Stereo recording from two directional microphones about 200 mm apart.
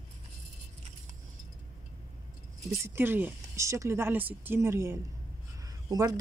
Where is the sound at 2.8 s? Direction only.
10° right (ahead or behind).